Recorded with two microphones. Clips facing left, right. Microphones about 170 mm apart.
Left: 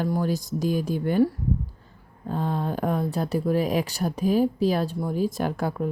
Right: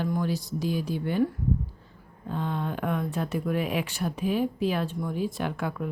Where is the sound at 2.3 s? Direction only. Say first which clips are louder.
Left 3 dB; 40° left (ahead or behind).